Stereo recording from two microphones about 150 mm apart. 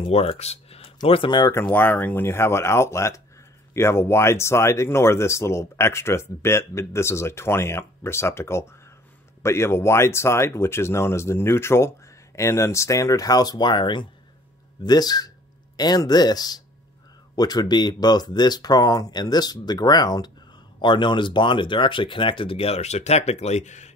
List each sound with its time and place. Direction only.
0.0 s speech: 40° left (ahead or behind)
1.5 s speech: 15° left (ahead or behind); by 23.9 s 50° left (ahead or behind)